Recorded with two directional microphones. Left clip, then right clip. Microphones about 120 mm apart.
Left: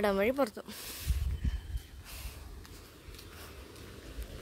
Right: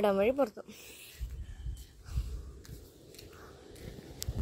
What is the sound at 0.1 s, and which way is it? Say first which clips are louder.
Speech: right 1 dB; 15° left (ahead or behind).